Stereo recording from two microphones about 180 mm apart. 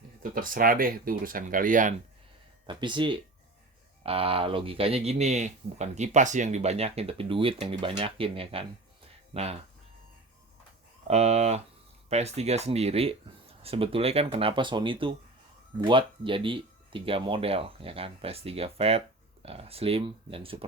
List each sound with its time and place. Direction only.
0.2 s speech: 50° right (ahead or behind)
2.6 s speech: 25° right (ahead or behind)
11.1 s speech: 35° right (ahead or behind)